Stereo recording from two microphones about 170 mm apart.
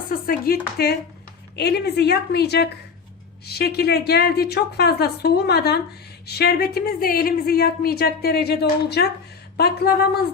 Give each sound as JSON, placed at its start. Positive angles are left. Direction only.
{"t": 0.1, "sound": "a woman's voice", "side_deg": 60}